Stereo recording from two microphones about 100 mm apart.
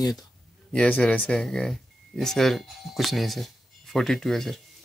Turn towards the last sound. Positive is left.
turn(degrees=5)  # may be behind; listen again after turning